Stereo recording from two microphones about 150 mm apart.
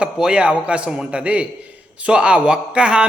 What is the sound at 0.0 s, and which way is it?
A man's voice, 5° right (ahead or behind).